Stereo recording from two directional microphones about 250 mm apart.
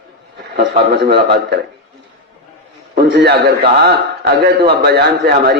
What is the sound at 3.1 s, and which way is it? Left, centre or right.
A man's voice, right.